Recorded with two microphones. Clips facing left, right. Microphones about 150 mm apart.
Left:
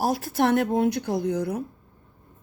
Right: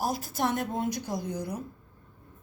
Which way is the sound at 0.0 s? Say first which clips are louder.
Left 6 dB; 70° left (ahead or behind).